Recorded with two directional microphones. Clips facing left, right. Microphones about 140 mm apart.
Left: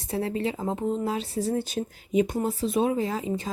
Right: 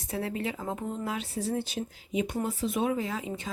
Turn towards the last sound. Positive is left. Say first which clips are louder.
# left 5 dB
turn(degrees=35)  # may be behind; listen again after turning